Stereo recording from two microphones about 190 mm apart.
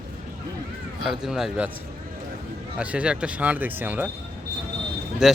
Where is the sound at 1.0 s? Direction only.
Centre (ahead or behind).